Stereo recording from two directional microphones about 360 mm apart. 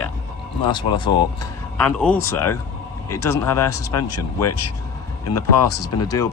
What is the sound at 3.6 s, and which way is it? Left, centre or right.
Speech, left.